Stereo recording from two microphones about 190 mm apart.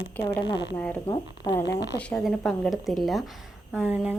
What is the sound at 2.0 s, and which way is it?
A woman's voice, 5° left (ahead or behind).